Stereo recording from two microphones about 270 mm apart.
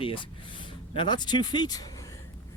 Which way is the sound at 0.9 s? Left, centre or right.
Centre.